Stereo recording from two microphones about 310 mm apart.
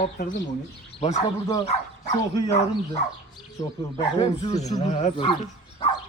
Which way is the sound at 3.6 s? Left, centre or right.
Centre.